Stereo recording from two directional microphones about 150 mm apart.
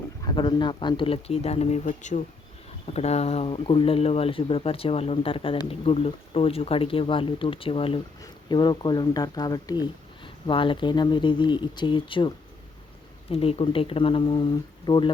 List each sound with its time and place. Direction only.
0.3 s speech: 30° left (ahead or behind)
13.3 s speech: 40° left (ahead or behind)